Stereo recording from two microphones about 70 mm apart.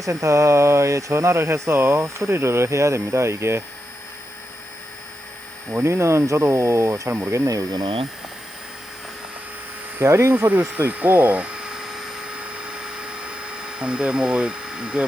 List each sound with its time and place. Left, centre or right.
0.0 s speech: right
5.8 s speech: right
7.3 s speech: right
10.0 s speech: right
10.3 s speech: right
10.9 s a sound: right